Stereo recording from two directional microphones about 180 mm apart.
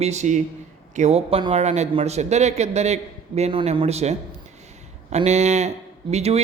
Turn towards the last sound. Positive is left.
turn(degrees=-35)  # may be behind; listen again after turning